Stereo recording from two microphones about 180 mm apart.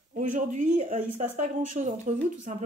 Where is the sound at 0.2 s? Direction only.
45° right (ahead or behind).